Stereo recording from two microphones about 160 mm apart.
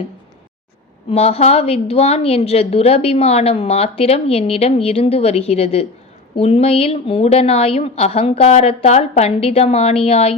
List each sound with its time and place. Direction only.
1.1 s a woman's voice: 40° left (ahead or behind)